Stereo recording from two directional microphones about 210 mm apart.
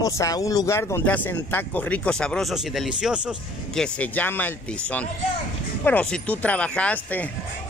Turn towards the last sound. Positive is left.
turn(degrees=5)  # may be behind; listen again after turning